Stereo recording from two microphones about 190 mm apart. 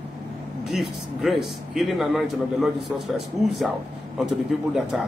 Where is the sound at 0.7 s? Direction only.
Centre (ahead or behind).